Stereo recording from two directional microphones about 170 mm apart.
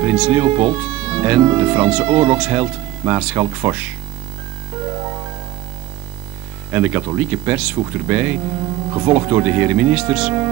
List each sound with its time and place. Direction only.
0.0 s speech: 5° right (ahead or behind)
4.8 s music: 20° right (ahead or behind)
6.7 s speech: 10° right (ahead or behind)